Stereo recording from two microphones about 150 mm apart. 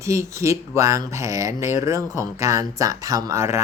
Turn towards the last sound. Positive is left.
turn(degrees=-20)  # may be behind; listen again after turning